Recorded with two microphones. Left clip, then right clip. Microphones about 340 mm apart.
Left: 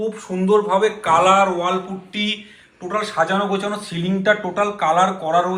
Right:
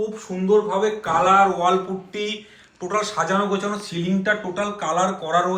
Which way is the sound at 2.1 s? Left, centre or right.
Centre.